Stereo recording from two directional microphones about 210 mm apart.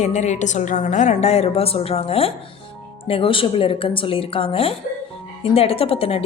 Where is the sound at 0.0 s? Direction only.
35° left (ahead or behind).